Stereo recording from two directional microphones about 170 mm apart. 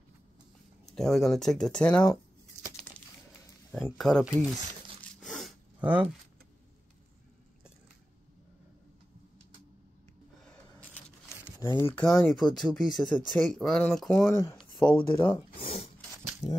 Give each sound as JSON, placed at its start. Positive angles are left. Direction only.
{"t": 0.8, "sound": "speech", "side_deg": 0}
{"t": 3.8, "sound": "speech", "side_deg": 5}
{"t": 5.8, "sound": "speech", "side_deg": -10}
{"t": 10.4, "sound": "a sound", "side_deg": 10}
{"t": 13.3, "sound": "speech", "side_deg": 0}
{"t": 15.1, "sound": "speech", "side_deg": 30}